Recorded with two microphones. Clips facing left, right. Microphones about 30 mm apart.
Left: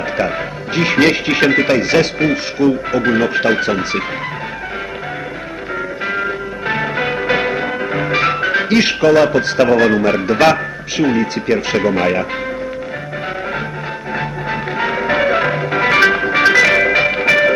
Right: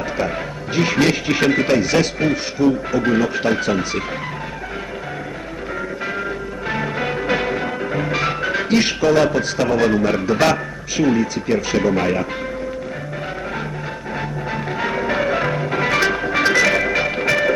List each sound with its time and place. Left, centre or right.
0.2 s speech: left
6.1 s music: left
14.2 s music: left